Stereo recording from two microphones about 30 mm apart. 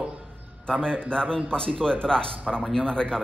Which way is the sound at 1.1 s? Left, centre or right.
Left.